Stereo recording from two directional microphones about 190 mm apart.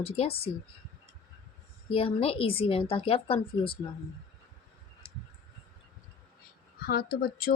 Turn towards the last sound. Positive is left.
turn(degrees=50)  # may be behind; listen again after turning